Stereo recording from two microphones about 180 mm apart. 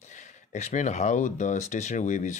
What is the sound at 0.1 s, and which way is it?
Speech, 40° left (ahead or behind).